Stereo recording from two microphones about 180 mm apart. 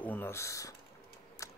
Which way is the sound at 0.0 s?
10° left (ahead or behind).